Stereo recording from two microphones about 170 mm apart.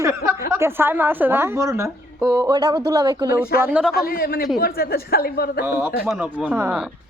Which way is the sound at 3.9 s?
65° left (ahead or behind).